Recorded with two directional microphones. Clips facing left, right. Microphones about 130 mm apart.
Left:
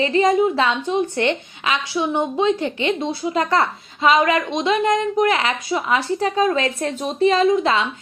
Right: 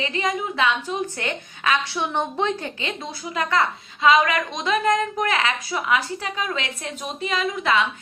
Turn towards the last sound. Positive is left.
turn(degrees=30)  # may be behind; listen again after turning